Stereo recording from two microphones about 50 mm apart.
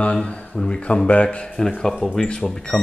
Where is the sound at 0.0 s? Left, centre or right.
Left.